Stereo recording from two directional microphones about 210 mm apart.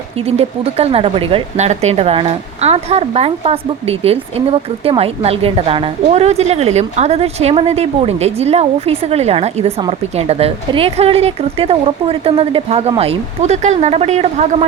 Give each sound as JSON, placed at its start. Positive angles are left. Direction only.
{"t": 0.3, "sound": "speech", "side_deg": -30}